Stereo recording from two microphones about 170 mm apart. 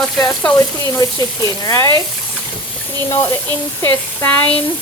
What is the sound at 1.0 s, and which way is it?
Speech, 25° left (ahead or behind).